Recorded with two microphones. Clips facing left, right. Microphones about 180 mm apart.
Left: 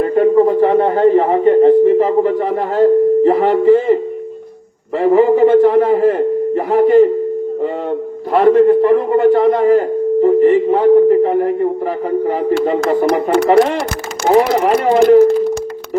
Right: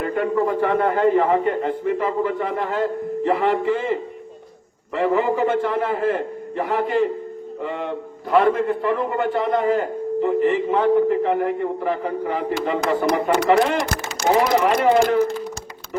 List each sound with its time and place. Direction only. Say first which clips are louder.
0.0 s a man's voice: left 10 dB; 35° left (ahead or behind)
8.3 s a man's voice: left 8 dB; 40° left (ahead or behind)